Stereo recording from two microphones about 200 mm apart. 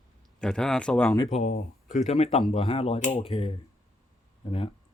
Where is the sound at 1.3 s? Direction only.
35° left (ahead or behind).